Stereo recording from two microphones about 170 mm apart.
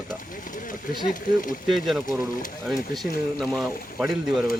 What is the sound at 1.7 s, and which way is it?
Speech, centre (ahead or behind).